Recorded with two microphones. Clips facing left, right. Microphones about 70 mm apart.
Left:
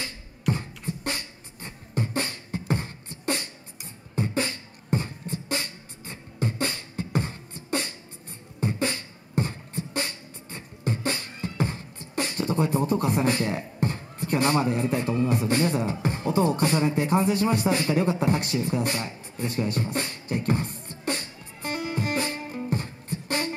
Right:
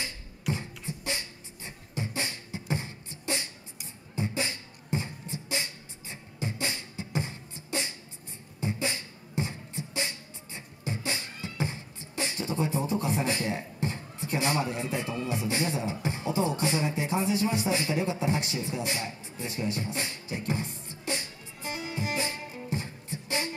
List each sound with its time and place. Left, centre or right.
0.5 s beatboxing: left